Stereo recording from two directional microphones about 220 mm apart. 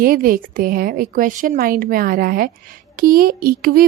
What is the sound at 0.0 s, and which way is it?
A woman's voice, 40° right (ahead or behind).